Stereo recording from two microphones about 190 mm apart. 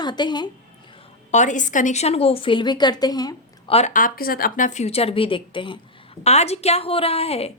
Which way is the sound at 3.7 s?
40° left (ahead or behind).